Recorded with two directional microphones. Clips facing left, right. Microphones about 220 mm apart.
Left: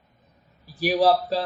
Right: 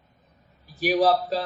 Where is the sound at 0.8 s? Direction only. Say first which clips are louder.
Left 1 dB; 35° left (ahead or behind).